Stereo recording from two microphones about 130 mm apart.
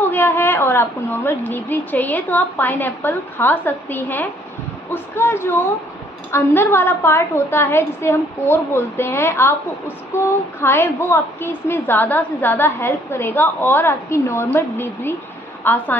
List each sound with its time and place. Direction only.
0.0 s a woman's voice: 15° left (ahead or behind)